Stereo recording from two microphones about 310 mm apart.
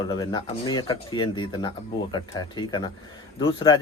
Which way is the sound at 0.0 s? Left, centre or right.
Centre.